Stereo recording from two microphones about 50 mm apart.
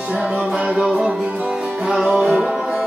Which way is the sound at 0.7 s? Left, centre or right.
Centre.